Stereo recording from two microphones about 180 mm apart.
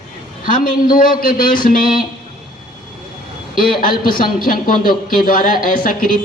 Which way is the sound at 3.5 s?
50° left (ahead or behind).